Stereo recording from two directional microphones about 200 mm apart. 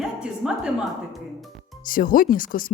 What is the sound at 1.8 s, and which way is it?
Speech, 45° left (ahead or behind).